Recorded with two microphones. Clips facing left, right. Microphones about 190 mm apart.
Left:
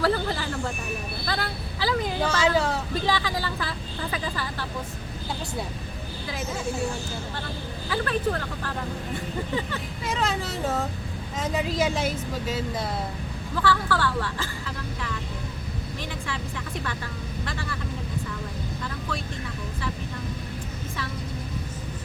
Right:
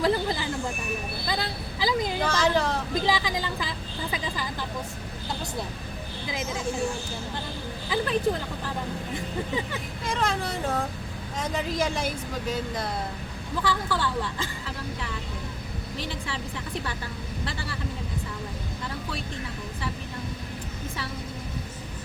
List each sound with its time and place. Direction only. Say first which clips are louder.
0.0 s speech: even; 15° right (ahead or behind)
2.2 s speech: left 2 dB; 5° left (ahead or behind)
2.9 s speech: even; 15° right (ahead or behind)
7.9 s speech: right 1 dB; 15° right (ahead or behind)
10.0 s a woman's voice: even; 5° left (ahead or behind)
13.6 s speech: left 3 dB; 15° right (ahead or behind)